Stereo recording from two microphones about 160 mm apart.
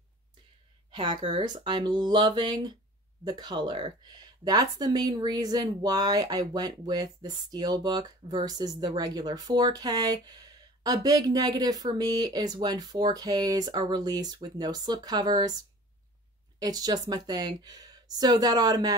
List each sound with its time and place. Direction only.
0.9 s speech: 30° right (ahead or behind)